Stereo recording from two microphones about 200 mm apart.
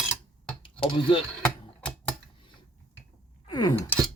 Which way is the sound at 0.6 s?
25° left (ahead or behind).